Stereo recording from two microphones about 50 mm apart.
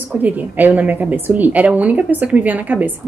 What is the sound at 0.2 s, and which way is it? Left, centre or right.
A woman's voice, right.